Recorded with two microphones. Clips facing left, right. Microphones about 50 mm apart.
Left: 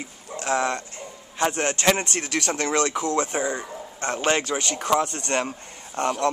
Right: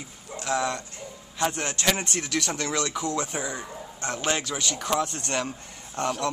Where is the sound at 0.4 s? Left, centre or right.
Left.